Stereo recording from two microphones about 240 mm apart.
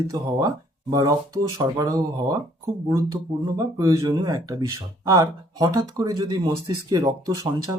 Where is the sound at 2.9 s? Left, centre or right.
Centre.